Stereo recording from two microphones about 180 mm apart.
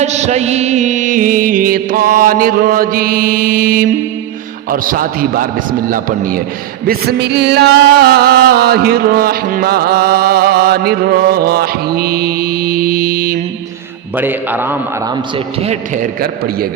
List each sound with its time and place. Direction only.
0.0 s music: 40° right (ahead or behind)
6.8 s music: 65° right (ahead or behind)
14.2 s a man's voice: 10° right (ahead or behind)